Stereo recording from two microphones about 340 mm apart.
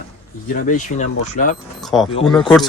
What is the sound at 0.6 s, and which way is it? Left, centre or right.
Speech, left.